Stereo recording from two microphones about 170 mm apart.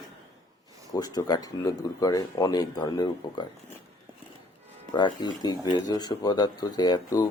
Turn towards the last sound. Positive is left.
turn(degrees=25)  # may be behind; listen again after turning